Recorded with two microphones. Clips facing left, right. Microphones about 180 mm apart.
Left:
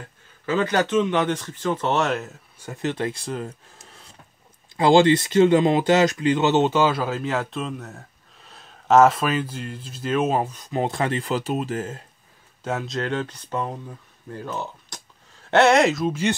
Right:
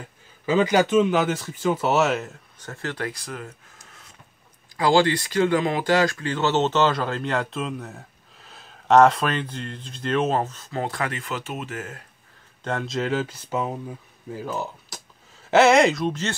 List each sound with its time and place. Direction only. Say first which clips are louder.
0.5 s speech: right 2 dB; 10° right (ahead or behind)
2.6 s speech: left 4 dB; 15° left (ahead or behind)
12.6 s speech: even; centre (ahead or behind)